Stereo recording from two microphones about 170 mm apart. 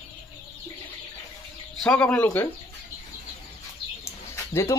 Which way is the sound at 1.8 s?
5° left (ahead or behind).